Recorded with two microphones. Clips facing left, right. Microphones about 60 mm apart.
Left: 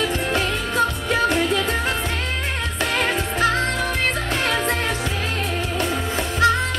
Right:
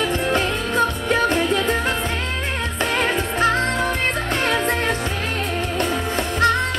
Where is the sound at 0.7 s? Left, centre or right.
Right.